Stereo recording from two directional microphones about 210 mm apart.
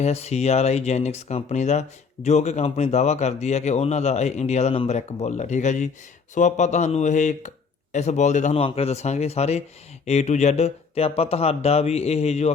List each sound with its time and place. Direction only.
0.0 s speech: 30° left (ahead or behind)